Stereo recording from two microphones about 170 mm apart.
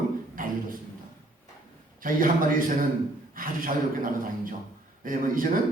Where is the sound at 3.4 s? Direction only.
55° right (ahead or behind).